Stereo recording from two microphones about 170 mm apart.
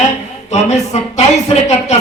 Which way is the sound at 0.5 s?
40° left (ahead or behind).